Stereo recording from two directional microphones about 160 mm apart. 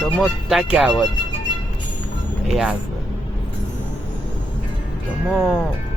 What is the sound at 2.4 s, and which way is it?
Speech, 5° right (ahead or behind).